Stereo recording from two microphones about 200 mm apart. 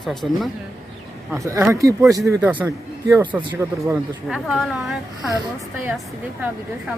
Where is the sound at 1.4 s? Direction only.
15° right (ahead or behind).